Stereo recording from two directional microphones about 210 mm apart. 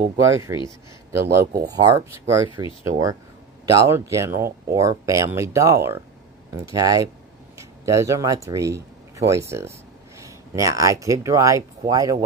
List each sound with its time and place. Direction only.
0.2 s speech: 15° right (ahead or behind)
1.6 s speech: 15° right (ahead or behind)